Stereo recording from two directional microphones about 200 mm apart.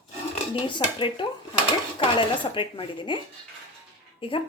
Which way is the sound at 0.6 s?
25° left (ahead or behind).